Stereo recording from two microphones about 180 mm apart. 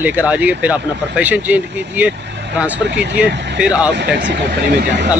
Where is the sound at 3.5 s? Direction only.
5° right (ahead or behind).